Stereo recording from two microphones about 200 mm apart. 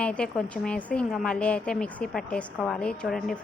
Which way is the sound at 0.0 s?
5° left (ahead or behind).